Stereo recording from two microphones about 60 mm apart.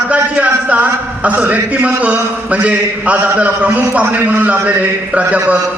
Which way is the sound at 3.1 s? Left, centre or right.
Right.